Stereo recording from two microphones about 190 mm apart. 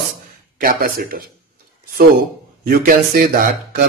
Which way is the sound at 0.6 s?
50° right (ahead or behind).